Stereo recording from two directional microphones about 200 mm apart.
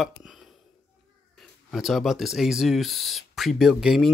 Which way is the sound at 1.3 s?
Centre (ahead or behind).